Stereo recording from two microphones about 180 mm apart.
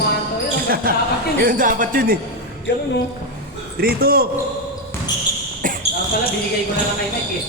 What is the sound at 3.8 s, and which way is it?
Speech, 60° right (ahead or behind).